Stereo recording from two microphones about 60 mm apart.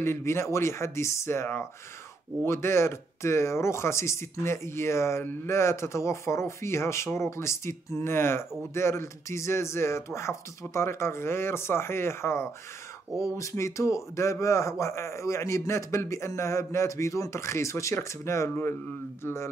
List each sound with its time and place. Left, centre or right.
0.0 s speech: left
13.2 s a man's voice: left